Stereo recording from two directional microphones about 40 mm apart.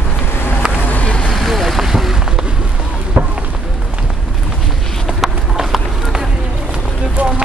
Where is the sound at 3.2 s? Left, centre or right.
Right.